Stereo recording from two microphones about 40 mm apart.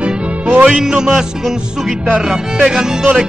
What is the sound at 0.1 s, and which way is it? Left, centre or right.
Music, right.